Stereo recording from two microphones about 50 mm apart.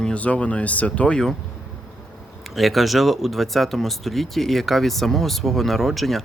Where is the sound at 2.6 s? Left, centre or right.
Centre.